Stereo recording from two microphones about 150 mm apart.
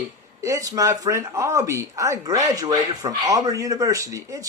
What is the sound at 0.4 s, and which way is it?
Speech, 20° right (ahead or behind).